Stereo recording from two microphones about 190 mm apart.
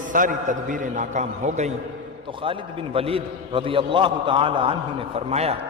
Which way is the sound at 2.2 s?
25° right (ahead or behind).